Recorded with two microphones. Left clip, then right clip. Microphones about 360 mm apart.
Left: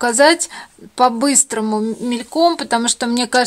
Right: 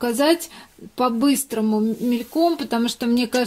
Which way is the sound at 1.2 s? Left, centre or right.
Left.